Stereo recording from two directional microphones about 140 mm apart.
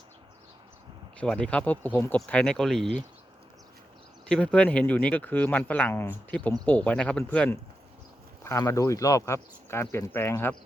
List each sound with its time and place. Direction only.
1.2 s speech: 10° left (ahead or behind)
4.3 s speech: 5° left (ahead or behind)
8.4 s speech: 20° left (ahead or behind)